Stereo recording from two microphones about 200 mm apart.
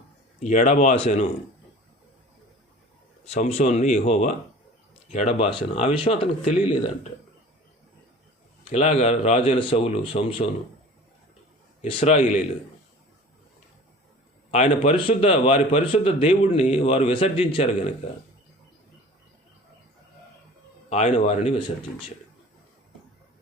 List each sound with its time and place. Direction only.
0.4 s speech: 35° left (ahead or behind)
3.2 s speech: 30° left (ahead or behind)
8.7 s a man's voice: 35° left (ahead or behind)
11.8 s speech: 30° left (ahead or behind)
14.5 s a man's voice: 35° left (ahead or behind)
20.9 s speech: 35° left (ahead or behind)